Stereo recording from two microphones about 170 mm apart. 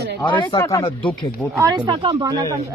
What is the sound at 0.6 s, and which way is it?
Speech, 20° left (ahead or behind).